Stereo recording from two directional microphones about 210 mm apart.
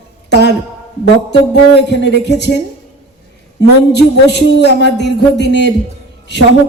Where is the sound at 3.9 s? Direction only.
55° left (ahead or behind).